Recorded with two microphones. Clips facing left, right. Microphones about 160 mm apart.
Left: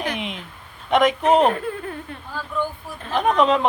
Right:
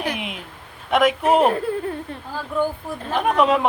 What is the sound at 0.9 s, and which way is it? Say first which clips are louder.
Speech: even; 5° right (ahead or behind).